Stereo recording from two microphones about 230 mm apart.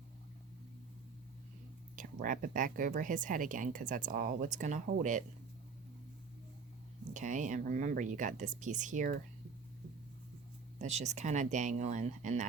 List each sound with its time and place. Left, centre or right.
2.0 s speech: right
7.1 s speech: right
10.8 s speech: right